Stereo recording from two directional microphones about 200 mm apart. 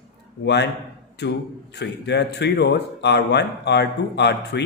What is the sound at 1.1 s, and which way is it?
Speech, 55° left (ahead or behind).